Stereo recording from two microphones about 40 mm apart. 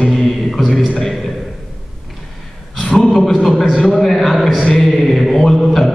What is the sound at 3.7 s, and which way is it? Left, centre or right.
Speech, left.